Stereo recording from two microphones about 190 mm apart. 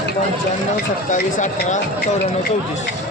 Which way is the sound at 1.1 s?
40° left (ahead or behind).